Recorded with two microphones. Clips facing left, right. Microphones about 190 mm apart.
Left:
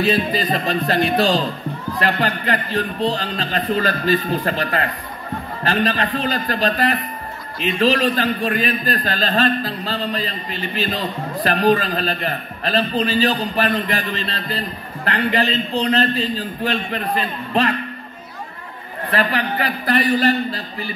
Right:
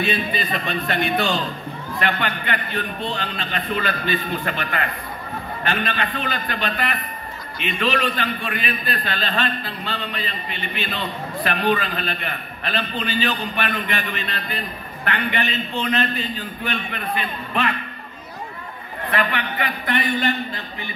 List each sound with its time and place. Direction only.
0.0 s a man's voice: 40° left (ahead or behind)
19.0 s a man's voice: 35° left (ahead or behind)